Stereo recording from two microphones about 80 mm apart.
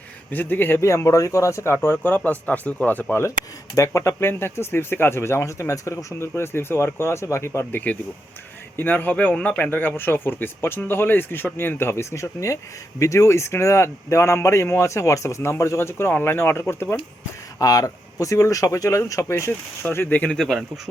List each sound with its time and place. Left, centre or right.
0.3 s speech: left
3.8 s speech: left
7.7 s speech: left
17.6 s speech: left
20.3 s speech: centre